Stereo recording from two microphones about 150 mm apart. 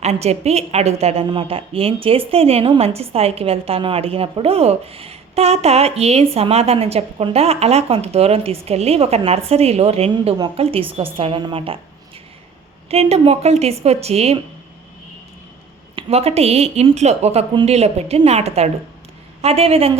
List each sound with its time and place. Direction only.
0.0 s a woman's voice: 45° right (ahead or behind)
12.9 s a woman's voice: 45° right (ahead or behind)
16.0 s a woman's voice: 40° right (ahead or behind)